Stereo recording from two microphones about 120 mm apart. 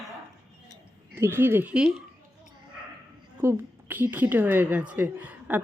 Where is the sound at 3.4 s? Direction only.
15° right (ahead or behind).